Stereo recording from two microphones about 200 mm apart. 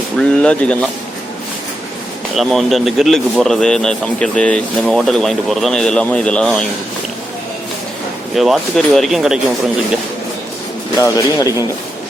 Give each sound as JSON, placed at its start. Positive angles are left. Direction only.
{"t": 0.2, "sound": "a man's voice", "side_deg": 5}
{"t": 2.3, "sound": "a man's voice", "side_deg": 0}
{"t": 8.4, "sound": "a man's voice", "side_deg": 0}
{"t": 10.9, "sound": "speech", "side_deg": 15}